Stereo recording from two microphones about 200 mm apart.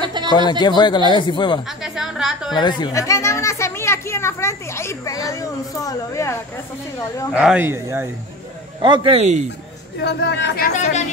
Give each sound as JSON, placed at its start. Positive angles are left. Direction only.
{"t": 0.0, "sound": "a sound", "side_deg": -20}
{"t": 0.3, "sound": "speech", "side_deg": 20}
{"t": 1.8, "sound": "a sound", "side_deg": 0}
{"t": 2.5, "sound": "speech", "side_deg": 20}
{"t": 7.3, "sound": "speech", "side_deg": -5}
{"t": 8.8, "sound": "speech", "side_deg": -25}
{"t": 10.0, "sound": "speech", "side_deg": 60}
{"t": 10.8, "sound": "speech", "side_deg": 35}